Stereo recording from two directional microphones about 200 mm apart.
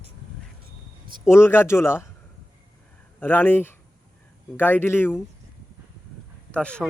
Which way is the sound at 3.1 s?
10° left (ahead or behind).